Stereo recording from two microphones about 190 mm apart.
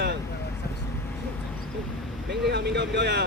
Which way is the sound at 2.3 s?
60° right (ahead or behind).